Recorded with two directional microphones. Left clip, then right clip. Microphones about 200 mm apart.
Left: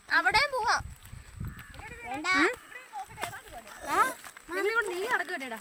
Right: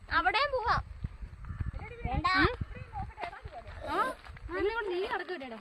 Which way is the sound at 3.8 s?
15° left (ahead or behind).